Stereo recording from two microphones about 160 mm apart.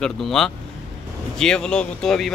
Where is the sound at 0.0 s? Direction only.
Centre (ahead or behind).